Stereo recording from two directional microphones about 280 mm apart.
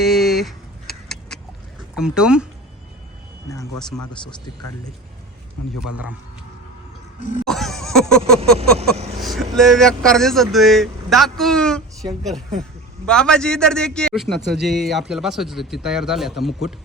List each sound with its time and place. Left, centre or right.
0.0 s vehicle: centre
2.0 s speech: centre
3.8 s speech: centre
7.2 s music: left
7.4 s a sound: centre
9.2 s speech: centre
13.1 s speech: centre